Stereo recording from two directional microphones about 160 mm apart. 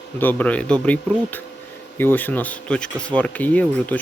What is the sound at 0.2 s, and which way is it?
Speech, 10° left (ahead or behind).